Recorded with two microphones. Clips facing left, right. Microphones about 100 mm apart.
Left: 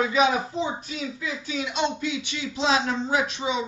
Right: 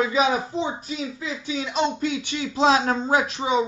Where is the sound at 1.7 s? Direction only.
40° right (ahead or behind).